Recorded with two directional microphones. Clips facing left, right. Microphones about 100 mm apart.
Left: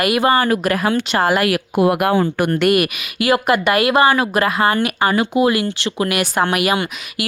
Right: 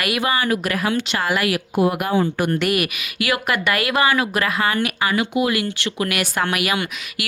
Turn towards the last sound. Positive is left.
turn(degrees=30)  # may be behind; listen again after turning